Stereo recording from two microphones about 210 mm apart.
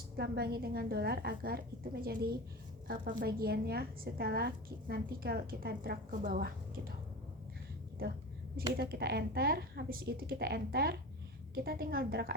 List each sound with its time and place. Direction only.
0.2 s a woman's voice: 50° right (ahead or behind)
8.7 s a woman's voice: 50° right (ahead or behind)